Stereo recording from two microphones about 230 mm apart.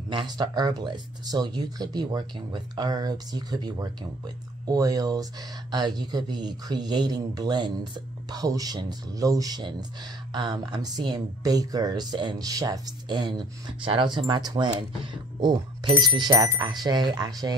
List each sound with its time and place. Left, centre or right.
0.1 s speech: centre